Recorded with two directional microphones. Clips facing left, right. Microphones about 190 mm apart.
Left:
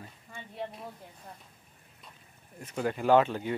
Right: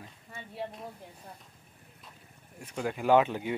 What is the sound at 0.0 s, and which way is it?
Speech, centre (ahead or behind).